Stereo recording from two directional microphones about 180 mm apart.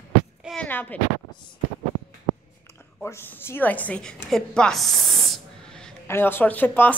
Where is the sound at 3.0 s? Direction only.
10° left (ahead or behind).